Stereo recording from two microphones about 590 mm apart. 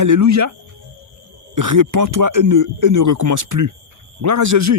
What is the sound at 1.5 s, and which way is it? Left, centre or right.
Speech, right.